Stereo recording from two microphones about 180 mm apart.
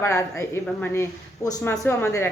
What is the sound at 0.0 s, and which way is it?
A woman's voice, 15° left (ahead or behind).